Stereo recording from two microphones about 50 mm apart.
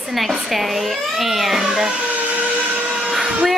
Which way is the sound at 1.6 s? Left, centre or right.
Centre.